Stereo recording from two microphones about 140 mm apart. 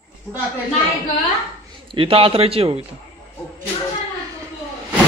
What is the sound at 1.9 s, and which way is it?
Speech, 40° right (ahead or behind).